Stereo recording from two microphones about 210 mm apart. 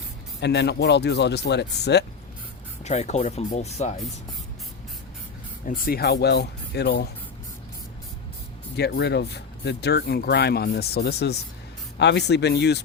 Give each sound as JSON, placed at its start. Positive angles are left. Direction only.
{"t": 0.3, "sound": "speech", "side_deg": 55}
{"t": 2.8, "sound": "speech", "side_deg": 30}
{"t": 5.6, "sound": "speech", "side_deg": 45}
{"t": 8.7, "sound": "speech", "side_deg": 50}